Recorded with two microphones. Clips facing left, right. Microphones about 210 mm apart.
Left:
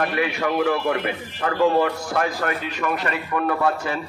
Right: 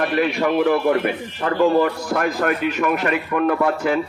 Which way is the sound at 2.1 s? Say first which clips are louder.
Right 5 dB; 50° right (ahead or behind).